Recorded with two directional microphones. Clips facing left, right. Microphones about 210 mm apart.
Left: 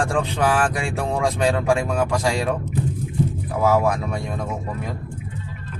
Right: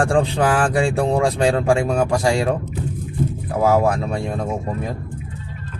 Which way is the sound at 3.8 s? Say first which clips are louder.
Right 3 dB; 30° right (ahead or behind).